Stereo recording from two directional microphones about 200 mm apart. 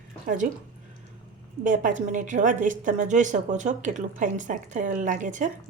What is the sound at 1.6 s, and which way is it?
A woman's voice, 40° right (ahead or behind).